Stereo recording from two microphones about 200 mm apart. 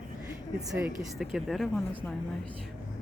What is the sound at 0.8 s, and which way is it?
Speech, centre (ahead or behind).